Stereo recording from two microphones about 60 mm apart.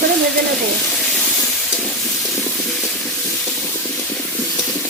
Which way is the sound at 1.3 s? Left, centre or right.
Centre.